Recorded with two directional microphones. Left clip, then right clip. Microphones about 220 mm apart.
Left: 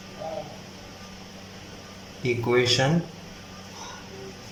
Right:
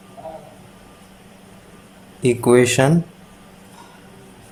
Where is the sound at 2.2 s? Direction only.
40° right (ahead or behind).